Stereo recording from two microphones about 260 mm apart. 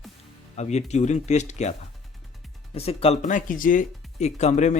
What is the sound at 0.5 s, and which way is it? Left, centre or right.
Speech, left.